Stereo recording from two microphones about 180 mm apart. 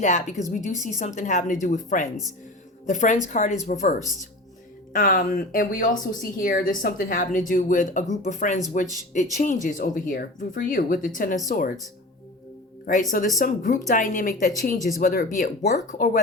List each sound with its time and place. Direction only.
0.0 s speech: 40° left (ahead or behind)
4.9 s speech: 50° left (ahead or behind)
12.8 s speech: 45° left (ahead or behind)